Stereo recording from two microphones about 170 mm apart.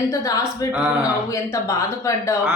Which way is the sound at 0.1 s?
20° left (ahead or behind).